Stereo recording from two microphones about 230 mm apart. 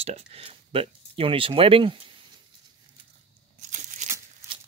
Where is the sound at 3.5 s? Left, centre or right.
Right.